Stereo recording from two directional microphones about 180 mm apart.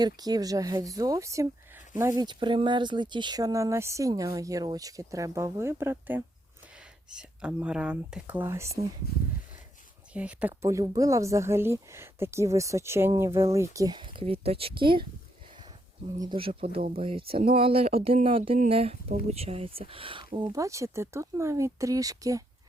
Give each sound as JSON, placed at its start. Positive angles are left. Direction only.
{"t": 0.0, "sound": "speech", "side_deg": -20}
{"t": 9.1, "sound": "speech", "side_deg": 60}
{"t": 10.1, "sound": "speech", "side_deg": -5}
{"t": 16.2, "sound": "speech", "side_deg": -30}